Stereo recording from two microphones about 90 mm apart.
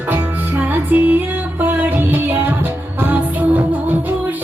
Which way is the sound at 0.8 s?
20° right (ahead or behind).